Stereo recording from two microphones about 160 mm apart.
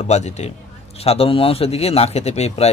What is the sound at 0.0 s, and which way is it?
A man's voice, 45° left (ahead or behind).